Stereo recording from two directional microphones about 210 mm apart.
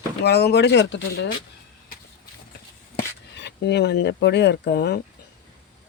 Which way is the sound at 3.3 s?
55° left (ahead or behind).